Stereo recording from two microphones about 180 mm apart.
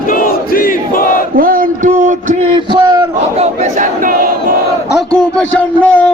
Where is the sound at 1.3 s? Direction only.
50° right (ahead or behind).